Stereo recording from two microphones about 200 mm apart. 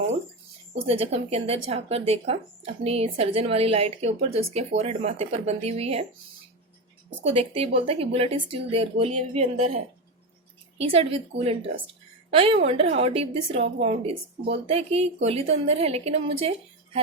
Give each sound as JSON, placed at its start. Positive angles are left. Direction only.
{"t": 0.7, "sound": "speech", "side_deg": -30}
{"t": 7.3, "sound": "speech", "side_deg": -30}